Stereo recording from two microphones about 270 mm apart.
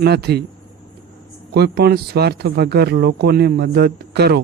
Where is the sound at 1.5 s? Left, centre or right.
Right.